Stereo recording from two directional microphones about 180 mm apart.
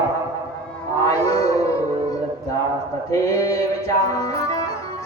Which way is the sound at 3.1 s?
20° left (ahead or behind).